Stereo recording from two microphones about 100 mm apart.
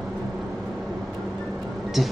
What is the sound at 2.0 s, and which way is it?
Speech, centre (ahead or behind).